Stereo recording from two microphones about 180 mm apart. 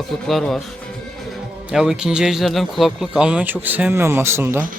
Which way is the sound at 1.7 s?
5° right (ahead or behind).